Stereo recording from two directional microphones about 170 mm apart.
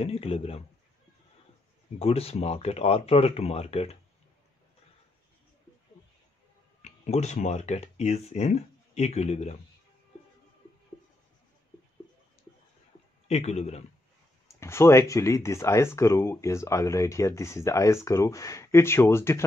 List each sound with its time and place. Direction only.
0.0 s speech: 35° left (ahead or behind)
2.0 s speech: 35° left (ahead or behind)
6.8 s speech: 40° left (ahead or behind)
13.3 s speech: 40° left (ahead or behind)
14.6 s speech: 15° left (ahead or behind)